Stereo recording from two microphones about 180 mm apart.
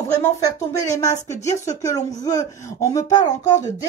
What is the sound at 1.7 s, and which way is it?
Speech, 20° left (ahead or behind).